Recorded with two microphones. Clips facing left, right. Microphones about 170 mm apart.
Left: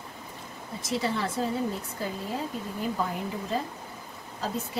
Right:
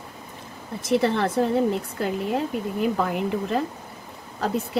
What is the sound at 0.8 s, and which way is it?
Speech, 60° right (ahead or behind).